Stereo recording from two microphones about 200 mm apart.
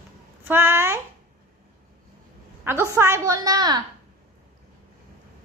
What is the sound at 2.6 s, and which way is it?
A woman's voice, 15° right (ahead or behind).